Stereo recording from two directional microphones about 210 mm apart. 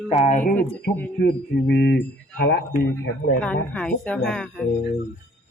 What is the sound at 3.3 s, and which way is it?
Speech, 5° left (ahead or behind).